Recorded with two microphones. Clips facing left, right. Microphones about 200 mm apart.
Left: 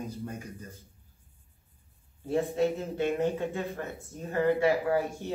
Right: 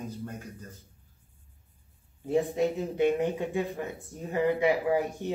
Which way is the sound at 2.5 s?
15° right (ahead or behind).